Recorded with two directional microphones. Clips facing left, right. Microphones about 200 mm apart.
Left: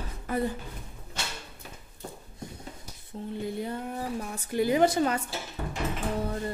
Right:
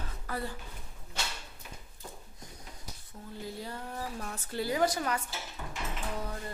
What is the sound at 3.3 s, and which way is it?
Speech, 20° left (ahead or behind).